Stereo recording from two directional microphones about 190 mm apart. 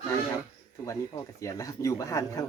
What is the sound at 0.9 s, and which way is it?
Speech, 15° left (ahead or behind).